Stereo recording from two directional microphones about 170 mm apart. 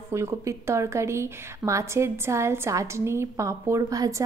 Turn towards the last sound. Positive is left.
turn(degrees=-20)  # may be behind; listen again after turning